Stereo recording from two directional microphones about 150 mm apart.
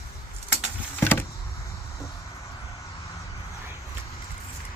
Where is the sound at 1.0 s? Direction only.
15° left (ahead or behind).